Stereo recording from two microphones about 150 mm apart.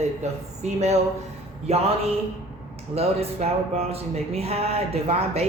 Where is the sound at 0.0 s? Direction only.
50° right (ahead or behind).